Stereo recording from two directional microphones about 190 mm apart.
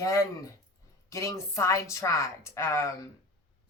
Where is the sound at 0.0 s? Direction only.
15° left (ahead or behind).